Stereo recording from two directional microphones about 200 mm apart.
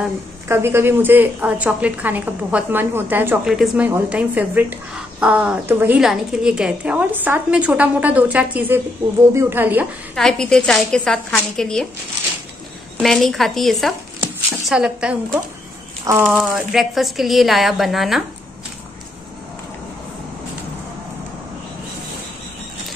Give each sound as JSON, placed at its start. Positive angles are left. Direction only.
{"t": 0.5, "sound": "a woman's voice", "side_deg": -10}
{"t": 10.1, "sound": "speech", "side_deg": 5}
{"t": 13.0, "sound": "speech", "side_deg": 0}